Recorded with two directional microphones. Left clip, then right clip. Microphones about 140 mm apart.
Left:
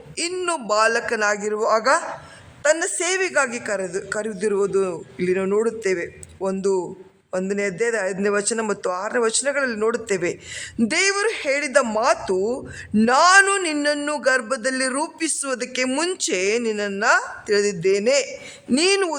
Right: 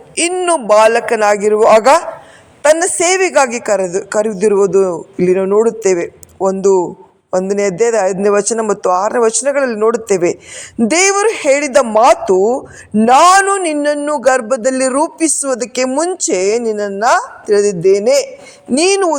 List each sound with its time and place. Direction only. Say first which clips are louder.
0.4 s a man's voice: right 11 dB; 25° right (ahead or behind)
12.5 s speech: right 7 dB; 5° right (ahead or behind)
13.2 s a man's voice: right 6 dB; 25° right (ahead or behind)